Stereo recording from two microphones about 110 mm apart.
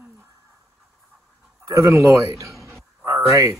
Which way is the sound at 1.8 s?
30° right (ahead or behind).